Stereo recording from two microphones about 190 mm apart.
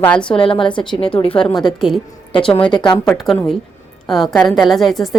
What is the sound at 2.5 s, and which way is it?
Speech, 25° left (ahead or behind).